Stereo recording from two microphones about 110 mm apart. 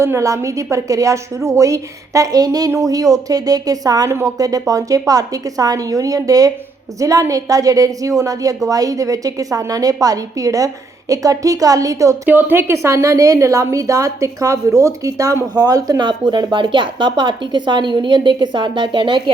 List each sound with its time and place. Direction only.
0.0 s a woman's voice: 25° right (ahead or behind)
12.3 s a woman's voice: 15° right (ahead or behind); by 19.3 s 45° right (ahead or behind)